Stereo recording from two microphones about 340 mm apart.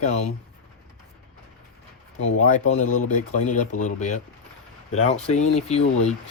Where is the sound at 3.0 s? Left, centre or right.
Left.